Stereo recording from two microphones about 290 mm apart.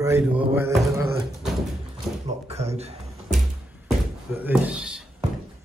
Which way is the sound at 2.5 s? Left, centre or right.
Right.